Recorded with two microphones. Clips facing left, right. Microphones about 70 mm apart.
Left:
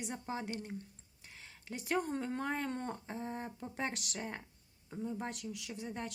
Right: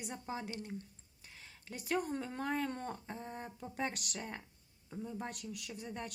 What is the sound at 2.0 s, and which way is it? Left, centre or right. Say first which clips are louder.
Speech: left 3 dB; centre.